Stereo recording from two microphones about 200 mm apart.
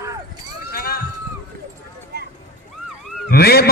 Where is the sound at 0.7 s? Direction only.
50° left (ahead or behind).